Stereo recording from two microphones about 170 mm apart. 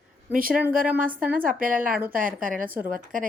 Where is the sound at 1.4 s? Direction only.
55° right (ahead or behind).